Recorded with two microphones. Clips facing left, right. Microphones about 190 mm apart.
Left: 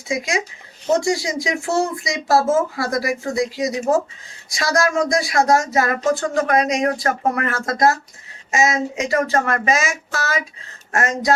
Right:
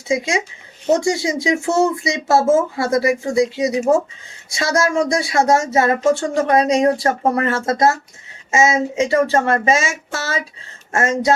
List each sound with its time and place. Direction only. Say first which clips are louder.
0.1 s speech: right 3 dB; 25° right (ahead or behind)